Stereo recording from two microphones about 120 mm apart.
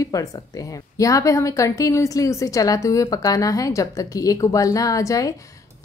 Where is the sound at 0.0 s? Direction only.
30° left (ahead or behind).